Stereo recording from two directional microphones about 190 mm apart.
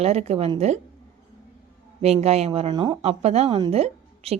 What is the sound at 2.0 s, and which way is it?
A woman's voice, 35° right (ahead or behind).